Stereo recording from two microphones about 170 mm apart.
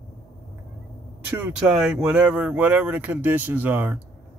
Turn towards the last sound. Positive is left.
turn(degrees=-10)  # may be behind; listen again after turning